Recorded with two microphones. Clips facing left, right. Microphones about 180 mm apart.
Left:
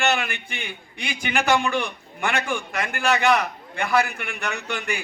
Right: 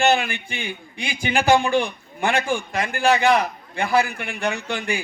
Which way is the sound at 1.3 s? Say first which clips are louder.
Right 4 dB; 30° right (ahead or behind).